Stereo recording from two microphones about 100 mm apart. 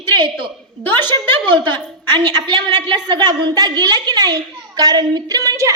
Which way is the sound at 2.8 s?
45° right (ahead or behind).